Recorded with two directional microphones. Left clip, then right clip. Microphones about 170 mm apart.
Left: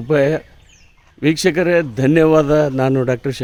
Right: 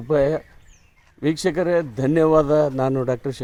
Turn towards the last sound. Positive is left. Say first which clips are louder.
# left 5 dB
turn(degrees=20)  # may be behind; listen again after turning